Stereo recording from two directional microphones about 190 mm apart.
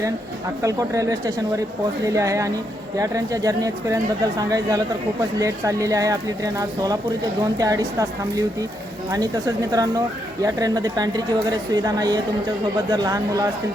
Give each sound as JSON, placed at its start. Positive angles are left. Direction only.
{"t": 0.6, "sound": "speech", "side_deg": -15}
{"t": 9.7, "sound": "speech", "side_deg": -20}